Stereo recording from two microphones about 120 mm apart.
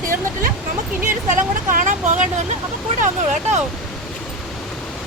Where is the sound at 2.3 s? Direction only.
80° right.